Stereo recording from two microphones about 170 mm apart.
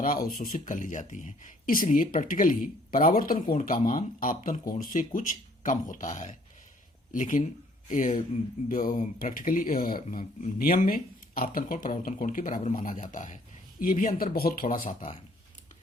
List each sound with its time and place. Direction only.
0.0 s speech: 55° left (ahead or behind)
3.8 s speech: 40° left (ahead or behind)
4.2 s speech: 55° left (ahead or behind)
14.8 s speech: 40° left (ahead or behind)